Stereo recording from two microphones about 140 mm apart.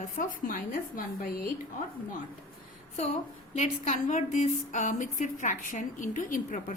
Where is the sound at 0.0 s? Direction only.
70° left (ahead or behind).